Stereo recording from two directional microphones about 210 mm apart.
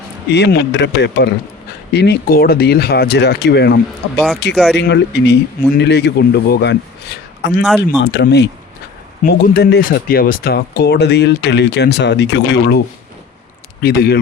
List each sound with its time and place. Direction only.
0.3 s speech: 55° left (ahead or behind)
4.5 s speech: centre (ahead or behind)
4.8 s a man's voice: 55° left (ahead or behind)
13.8 s speech: 50° left (ahead or behind)